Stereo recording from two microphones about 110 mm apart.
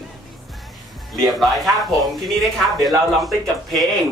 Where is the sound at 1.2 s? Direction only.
Centre (ahead or behind).